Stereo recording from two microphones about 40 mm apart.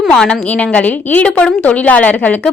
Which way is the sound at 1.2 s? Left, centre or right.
Left.